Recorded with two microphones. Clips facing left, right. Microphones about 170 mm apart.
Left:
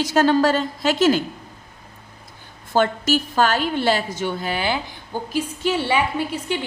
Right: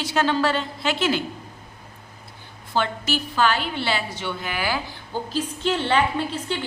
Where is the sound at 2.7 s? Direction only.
45° left (ahead or behind); by 4.8 s 25° left (ahead or behind).